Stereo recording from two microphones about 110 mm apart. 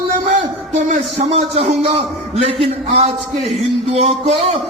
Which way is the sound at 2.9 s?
90° right.